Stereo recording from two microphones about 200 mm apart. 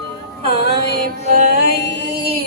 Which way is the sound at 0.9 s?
45° right (ahead or behind).